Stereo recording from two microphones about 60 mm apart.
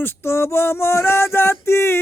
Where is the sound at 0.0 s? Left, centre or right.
Left.